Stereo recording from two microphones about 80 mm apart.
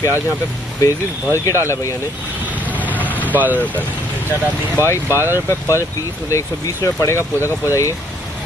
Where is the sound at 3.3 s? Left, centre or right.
Right.